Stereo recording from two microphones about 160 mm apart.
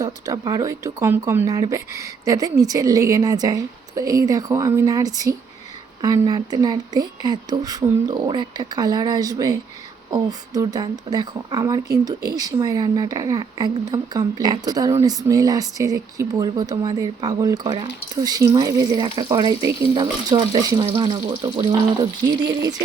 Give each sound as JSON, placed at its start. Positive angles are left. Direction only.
{"t": 0.0, "sound": "speech", "side_deg": -25}